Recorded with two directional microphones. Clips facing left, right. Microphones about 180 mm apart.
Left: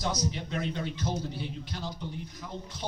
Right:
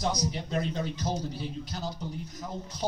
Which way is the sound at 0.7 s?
40° right (ahead or behind).